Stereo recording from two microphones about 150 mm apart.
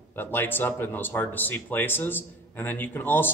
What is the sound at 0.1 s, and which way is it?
A man's voice, 15° left (ahead or behind).